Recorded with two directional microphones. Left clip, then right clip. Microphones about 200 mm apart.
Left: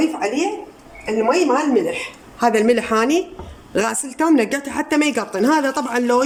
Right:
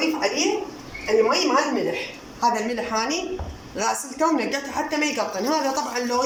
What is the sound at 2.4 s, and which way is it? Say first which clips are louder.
A woman's voice: left 7 dB; 55° left (ahead or behind).